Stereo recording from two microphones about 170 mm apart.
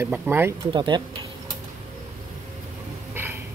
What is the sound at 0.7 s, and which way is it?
Speech, 25° right (ahead or behind).